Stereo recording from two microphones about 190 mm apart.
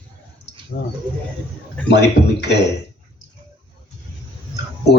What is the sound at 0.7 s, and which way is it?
Speech, 50° left (ahead or behind).